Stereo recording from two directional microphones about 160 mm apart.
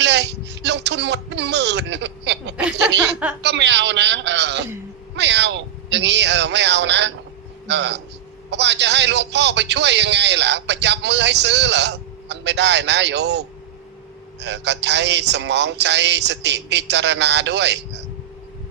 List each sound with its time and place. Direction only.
0.0 s a sound: 90° right
3.4 s a man's voice: 90° right
14.4 s a man's voice: 90° right